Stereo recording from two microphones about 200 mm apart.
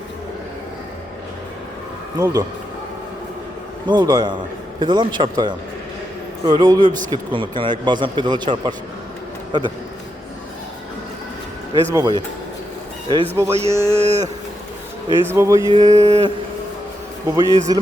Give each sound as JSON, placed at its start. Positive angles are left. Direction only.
{"t": 2.1, "sound": "speech", "side_deg": -20}
{"t": 3.8, "sound": "a man's voice", "side_deg": -20}
{"t": 11.7, "sound": "speech", "side_deg": -20}
{"t": 13.5, "sound": "speech", "side_deg": -30}
{"t": 15.2, "sound": "speech", "side_deg": -15}
{"t": 15.8, "sound": "speech", "side_deg": -35}
{"t": 17.2, "sound": "speech", "side_deg": -15}